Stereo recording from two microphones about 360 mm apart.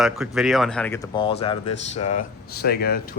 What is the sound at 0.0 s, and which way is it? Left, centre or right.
Speech, centre.